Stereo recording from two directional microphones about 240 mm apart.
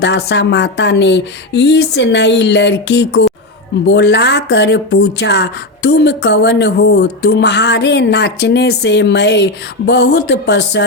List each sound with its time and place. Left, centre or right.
0.0 s speech: left